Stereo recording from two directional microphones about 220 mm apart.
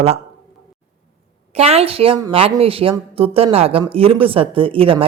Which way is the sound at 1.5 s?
30° right (ahead or behind).